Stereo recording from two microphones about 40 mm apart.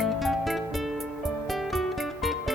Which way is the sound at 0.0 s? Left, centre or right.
Centre.